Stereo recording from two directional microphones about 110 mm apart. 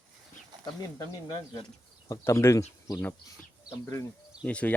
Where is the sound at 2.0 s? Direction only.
25° left (ahead or behind).